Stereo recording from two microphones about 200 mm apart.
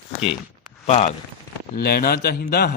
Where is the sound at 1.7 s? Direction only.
50° left (ahead or behind).